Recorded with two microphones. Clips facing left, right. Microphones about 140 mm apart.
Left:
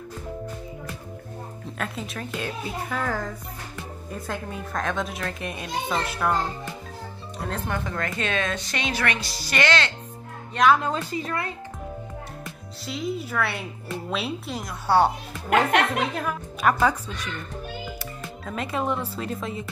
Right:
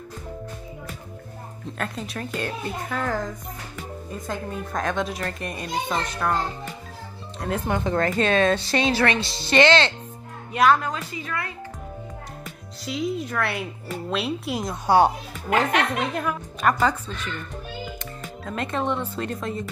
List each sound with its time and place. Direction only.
1.8 s a child's voice: centre (ahead or behind)
4.3 s a child's voice: centre (ahead or behind)
7.3 s speech: 10° right (ahead or behind)
7.7 s a woman's voice: 30° right (ahead or behind)
10.8 s a woman's voice: 30° left (ahead or behind)
12.8 s a child's voice: centre (ahead or behind)
14.6 s a woman's voice: 20° right (ahead or behind)
15.5 s a child's voice: centre (ahead or behind)